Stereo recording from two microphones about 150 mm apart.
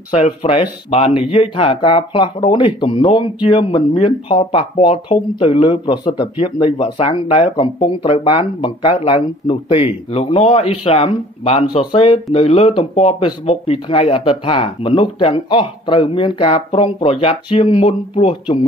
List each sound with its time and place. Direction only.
0.1 s speech: 45° left (ahead or behind)
11.9 s speech: 35° left (ahead or behind)
12.3 s speech: 45° left (ahead or behind)